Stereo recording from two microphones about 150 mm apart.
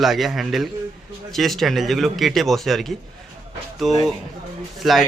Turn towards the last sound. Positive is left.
turn(degrees=0)  # may be behind; listen again after turning